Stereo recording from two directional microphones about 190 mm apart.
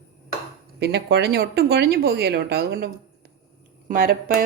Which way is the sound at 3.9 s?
50° right (ahead or behind).